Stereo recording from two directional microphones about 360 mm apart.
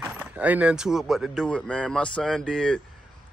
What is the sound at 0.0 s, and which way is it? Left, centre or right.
Speech, centre.